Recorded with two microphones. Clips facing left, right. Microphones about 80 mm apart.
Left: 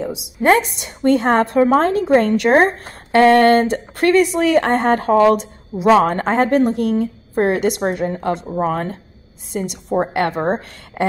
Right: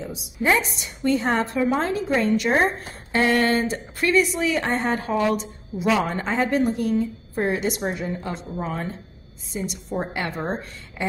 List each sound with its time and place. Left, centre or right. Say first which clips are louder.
0.4 s a woman's voice: left 7 dB; left